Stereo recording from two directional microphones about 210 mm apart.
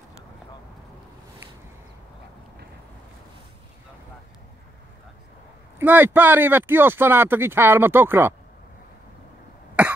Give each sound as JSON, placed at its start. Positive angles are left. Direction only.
{"t": 5.8, "sound": "speech", "side_deg": -10}
{"t": 9.8, "sound": "cough", "side_deg": -5}